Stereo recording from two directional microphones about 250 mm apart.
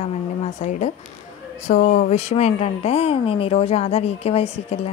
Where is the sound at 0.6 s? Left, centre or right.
Left.